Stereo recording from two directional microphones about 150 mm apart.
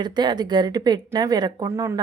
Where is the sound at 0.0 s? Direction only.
30° right (ahead or behind).